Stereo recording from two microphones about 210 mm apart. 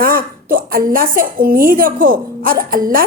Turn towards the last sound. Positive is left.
turn(degrees=-40)  # may be behind; listen again after turning